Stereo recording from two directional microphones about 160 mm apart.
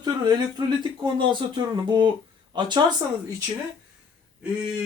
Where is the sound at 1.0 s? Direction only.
30° right (ahead or behind).